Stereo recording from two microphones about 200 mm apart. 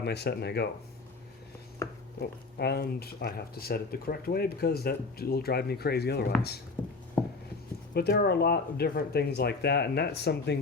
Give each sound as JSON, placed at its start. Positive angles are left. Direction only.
{"t": 0.0, "sound": "speech", "side_deg": 55}
{"t": 2.6, "sound": "speech", "side_deg": 55}
{"t": 6.8, "sound": "a sound", "side_deg": 20}
{"t": 7.9, "sound": "speech", "side_deg": 50}